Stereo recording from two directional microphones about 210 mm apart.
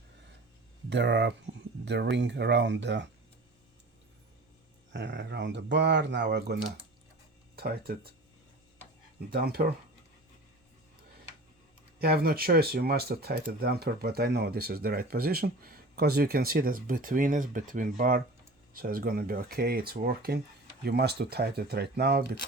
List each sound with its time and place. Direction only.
0.9 s speech: 55° right (ahead or behind)
4.9 s speech: 60° right (ahead or behind)
9.3 s speech: 45° right (ahead or behind)
11.9 s speech: 45° right (ahead or behind)